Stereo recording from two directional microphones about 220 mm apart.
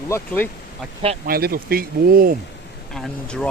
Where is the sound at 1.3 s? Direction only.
45° right (ahead or behind).